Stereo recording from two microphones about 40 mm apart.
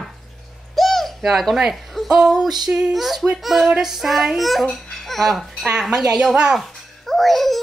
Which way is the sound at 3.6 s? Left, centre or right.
Centre.